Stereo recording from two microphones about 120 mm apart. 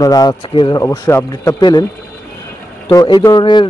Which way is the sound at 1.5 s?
35° left (ahead or behind).